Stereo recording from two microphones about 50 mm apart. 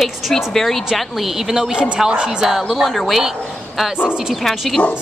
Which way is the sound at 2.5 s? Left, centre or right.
Centre.